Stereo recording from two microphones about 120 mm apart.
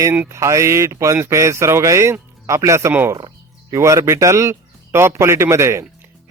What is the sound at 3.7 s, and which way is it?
A man's voice, 25° right (ahead or behind).